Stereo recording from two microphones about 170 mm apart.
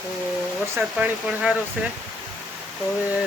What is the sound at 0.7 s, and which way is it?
Speech, 10° right (ahead or behind).